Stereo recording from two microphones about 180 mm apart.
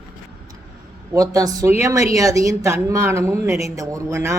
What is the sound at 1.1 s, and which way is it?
Speech, 20° right (ahead or behind).